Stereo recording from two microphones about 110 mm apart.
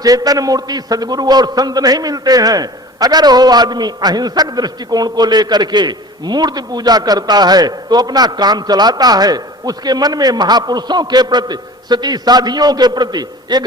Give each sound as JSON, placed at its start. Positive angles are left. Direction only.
{"t": 0.0, "sound": "a man's voice", "side_deg": -35}